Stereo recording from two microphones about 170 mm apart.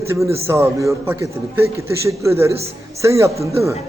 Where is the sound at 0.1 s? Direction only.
15° right (ahead or behind).